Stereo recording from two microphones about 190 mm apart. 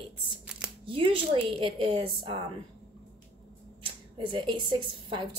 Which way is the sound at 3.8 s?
25° right (ahead or behind).